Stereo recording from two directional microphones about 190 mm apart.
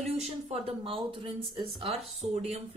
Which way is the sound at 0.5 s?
30° right (ahead or behind).